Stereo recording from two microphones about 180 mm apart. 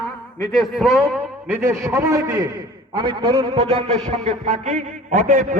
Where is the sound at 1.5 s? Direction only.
15° right (ahead or behind).